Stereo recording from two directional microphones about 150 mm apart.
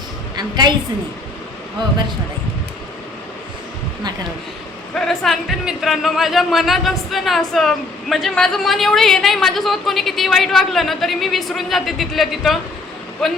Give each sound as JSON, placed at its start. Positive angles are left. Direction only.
{"t": 0.3, "sound": "a woman's voice", "side_deg": -30}
{"t": 4.9, "sound": "a woman's voice", "side_deg": 0}